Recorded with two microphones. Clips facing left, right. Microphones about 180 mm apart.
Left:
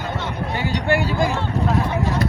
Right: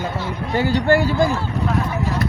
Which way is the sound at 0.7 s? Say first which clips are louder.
Right 4 dB; 15° left (ahead or behind).